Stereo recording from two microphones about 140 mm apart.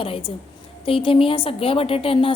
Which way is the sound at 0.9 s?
40° left (ahead or behind).